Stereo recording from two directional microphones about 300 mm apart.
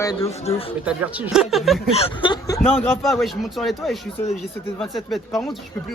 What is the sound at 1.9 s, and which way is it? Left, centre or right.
Speech, centre.